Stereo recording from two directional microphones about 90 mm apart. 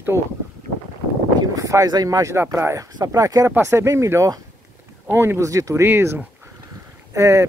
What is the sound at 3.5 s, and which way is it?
Speech, 30° right (ahead or behind).